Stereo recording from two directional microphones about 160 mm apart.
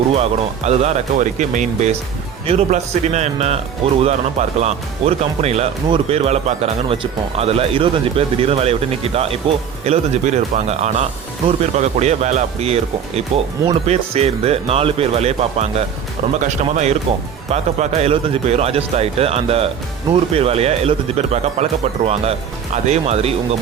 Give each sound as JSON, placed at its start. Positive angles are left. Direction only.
{"t": 0.1, "sound": "speech", "side_deg": -40}